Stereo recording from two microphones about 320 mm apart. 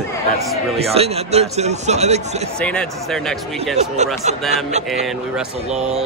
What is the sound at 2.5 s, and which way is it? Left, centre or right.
Speech, centre.